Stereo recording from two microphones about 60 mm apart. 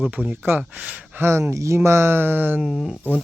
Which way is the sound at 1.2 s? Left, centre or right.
Right.